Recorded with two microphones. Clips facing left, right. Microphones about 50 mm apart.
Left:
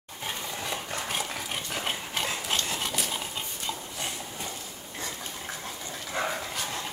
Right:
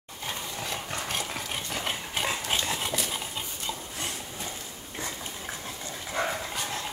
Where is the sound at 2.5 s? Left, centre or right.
Centre.